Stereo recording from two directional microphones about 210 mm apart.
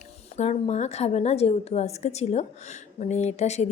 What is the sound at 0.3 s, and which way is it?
A woman's voice, 30° left (ahead or behind).